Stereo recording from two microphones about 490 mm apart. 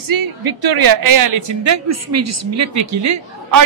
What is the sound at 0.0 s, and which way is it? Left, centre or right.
A man's voice, right.